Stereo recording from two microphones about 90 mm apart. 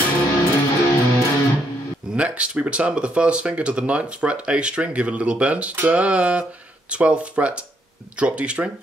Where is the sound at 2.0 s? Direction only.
15° right (ahead or behind).